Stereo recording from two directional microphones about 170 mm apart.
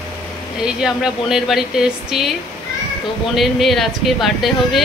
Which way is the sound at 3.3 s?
Centre (ahead or behind).